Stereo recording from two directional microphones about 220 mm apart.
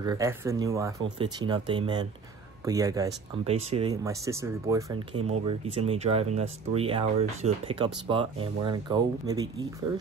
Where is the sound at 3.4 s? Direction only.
25° right (ahead or behind).